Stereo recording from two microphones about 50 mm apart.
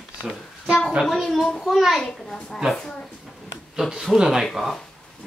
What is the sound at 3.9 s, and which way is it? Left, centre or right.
Speech, centre.